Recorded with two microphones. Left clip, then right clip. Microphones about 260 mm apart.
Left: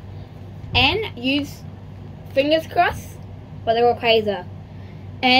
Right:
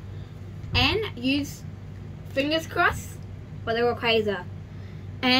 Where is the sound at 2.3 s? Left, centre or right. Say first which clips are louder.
Left 8 dB; right.